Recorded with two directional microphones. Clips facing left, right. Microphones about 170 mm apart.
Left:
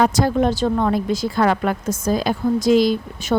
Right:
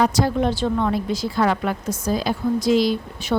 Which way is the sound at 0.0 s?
50° left (ahead or behind).